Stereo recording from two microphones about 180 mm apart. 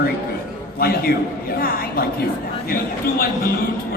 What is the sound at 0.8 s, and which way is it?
A woman's voice, 60° left (ahead or behind).